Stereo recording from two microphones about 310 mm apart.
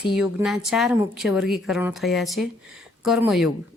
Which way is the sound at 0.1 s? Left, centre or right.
Centre.